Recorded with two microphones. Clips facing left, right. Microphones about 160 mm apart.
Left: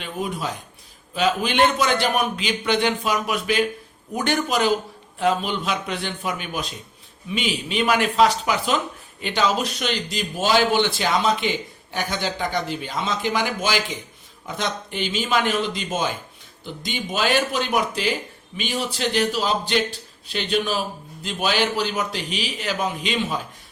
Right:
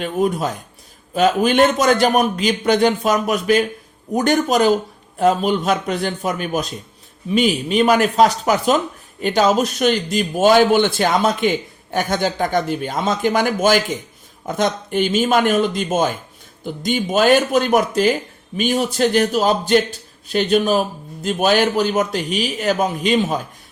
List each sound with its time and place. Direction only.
0.0 s speech: 45° right (ahead or behind)